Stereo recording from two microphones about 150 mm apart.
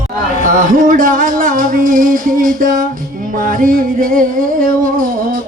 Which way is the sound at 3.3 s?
70° right (ahead or behind).